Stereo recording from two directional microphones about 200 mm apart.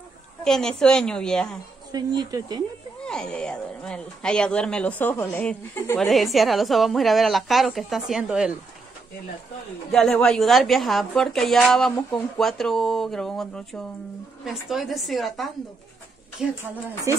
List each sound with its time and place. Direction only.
0.4 s speech: 5° left (ahead or behind)
1.9 s a woman's voice: 20° right (ahead or behind)
3.1 s speech: 5° left (ahead or behind)
9.8 s speech: centre (ahead or behind)